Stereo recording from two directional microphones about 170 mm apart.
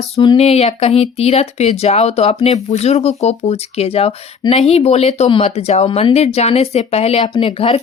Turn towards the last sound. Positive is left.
turn(degrees=35)  # may be behind; listen again after turning